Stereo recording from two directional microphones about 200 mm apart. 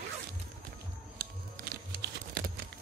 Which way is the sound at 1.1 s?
50° right (ahead or behind).